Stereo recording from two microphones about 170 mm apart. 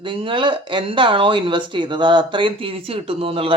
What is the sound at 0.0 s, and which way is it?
Speech, 30° right (ahead or behind).